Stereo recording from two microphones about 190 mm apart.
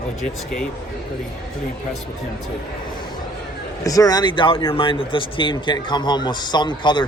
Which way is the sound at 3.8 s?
20° left (ahead or behind).